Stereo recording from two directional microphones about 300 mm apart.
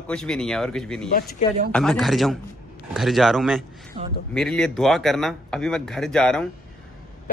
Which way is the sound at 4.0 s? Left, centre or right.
Right.